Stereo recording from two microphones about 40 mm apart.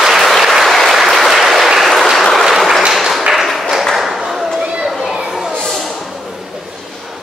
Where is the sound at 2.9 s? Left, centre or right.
Centre.